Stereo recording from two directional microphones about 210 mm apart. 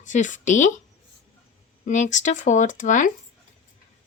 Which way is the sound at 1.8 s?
35° left (ahead or behind).